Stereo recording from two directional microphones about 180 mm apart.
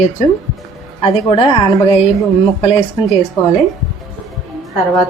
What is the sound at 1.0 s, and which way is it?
Speech, 30° left (ahead or behind).